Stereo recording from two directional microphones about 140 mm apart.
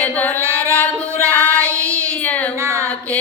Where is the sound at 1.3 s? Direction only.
10° left (ahead or behind).